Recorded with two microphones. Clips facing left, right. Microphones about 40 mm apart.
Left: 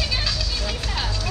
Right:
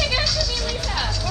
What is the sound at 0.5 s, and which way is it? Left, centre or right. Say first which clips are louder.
Music: right 2 dB; left.